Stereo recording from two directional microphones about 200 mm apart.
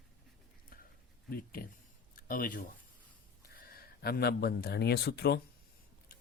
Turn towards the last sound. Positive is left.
turn(degrees=55)  # may be behind; listen again after turning